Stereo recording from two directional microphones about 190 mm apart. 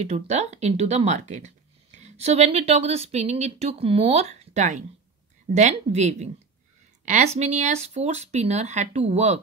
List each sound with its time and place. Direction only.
0.0 s speech: 35° right (ahead or behind)